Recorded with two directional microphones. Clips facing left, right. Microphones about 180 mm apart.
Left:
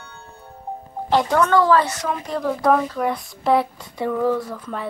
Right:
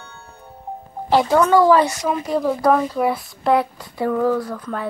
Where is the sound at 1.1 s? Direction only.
5° right (ahead or behind).